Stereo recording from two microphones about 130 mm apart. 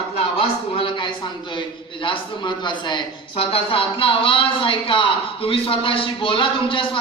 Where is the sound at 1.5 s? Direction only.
40° left (ahead or behind).